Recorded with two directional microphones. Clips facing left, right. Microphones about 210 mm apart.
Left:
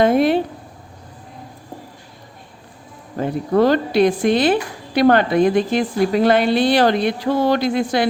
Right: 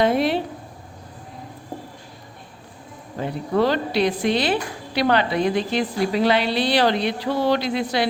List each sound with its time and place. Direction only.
0.0 s a woman's voice: 50° left (ahead or behind)
3.2 s a woman's voice: 50° left (ahead or behind)